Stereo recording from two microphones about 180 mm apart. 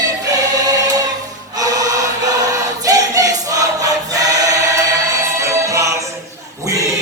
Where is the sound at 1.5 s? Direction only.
20° right (ahead or behind).